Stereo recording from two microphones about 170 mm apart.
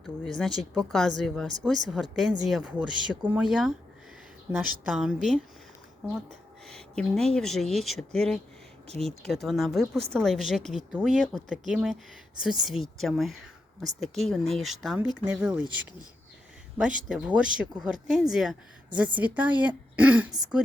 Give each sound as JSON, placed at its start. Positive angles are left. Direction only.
{"t": 0.0, "sound": "speech", "side_deg": 0}
{"t": 17.1, "sound": "speech", "side_deg": -5}